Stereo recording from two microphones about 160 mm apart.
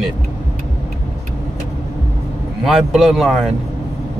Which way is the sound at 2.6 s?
5° right (ahead or behind).